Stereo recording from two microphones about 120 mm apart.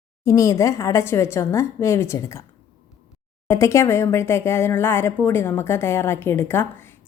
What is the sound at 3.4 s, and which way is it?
Speech, 25° left (ahead or behind).